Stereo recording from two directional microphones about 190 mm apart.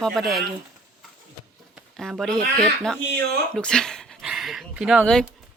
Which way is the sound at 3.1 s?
60° right (ahead or behind).